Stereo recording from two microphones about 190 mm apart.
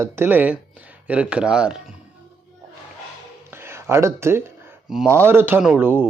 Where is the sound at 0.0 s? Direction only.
10° right (ahead or behind).